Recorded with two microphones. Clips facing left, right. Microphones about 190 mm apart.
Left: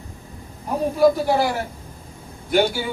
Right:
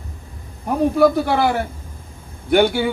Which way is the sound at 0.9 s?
60° right (ahead or behind).